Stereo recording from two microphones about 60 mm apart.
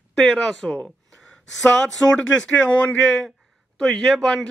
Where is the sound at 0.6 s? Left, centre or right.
Centre.